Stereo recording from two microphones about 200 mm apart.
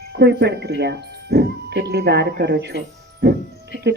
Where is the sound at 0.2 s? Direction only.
60° right (ahead or behind).